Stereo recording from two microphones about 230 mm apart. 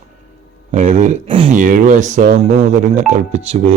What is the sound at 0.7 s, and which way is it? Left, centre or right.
Speech, right.